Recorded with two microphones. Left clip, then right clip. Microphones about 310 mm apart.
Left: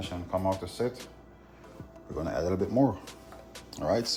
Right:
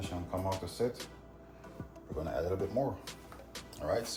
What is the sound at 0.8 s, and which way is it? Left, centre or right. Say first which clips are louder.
Speech: left 1 dB; left.